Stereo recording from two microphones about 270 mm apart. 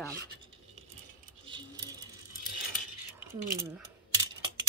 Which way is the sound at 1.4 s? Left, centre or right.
Centre.